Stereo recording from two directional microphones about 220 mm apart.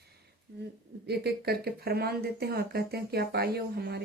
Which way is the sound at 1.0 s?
45° right (ahead or behind).